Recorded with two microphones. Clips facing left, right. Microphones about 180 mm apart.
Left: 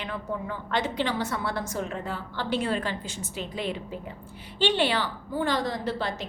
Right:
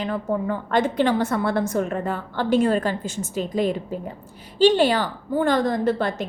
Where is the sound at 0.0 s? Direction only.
45° right (ahead or behind).